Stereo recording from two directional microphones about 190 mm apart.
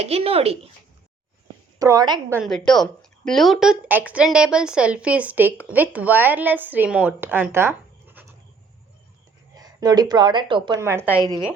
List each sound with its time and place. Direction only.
0.0 s speech: 30° right (ahead or behind)
1.8 s a woman's voice: 20° right (ahead or behind)
2.4 s a woman's voice: 5° left (ahead or behind)
9.6 s a woman's voice: 20° right (ahead or behind)